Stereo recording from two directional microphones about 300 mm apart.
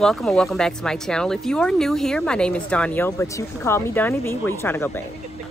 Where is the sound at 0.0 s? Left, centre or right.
Centre.